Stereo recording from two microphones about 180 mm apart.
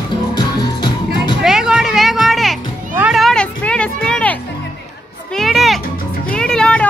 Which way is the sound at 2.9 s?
5° right (ahead or behind).